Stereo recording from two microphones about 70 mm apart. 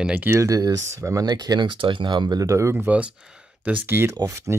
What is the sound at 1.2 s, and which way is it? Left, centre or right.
Speech, right.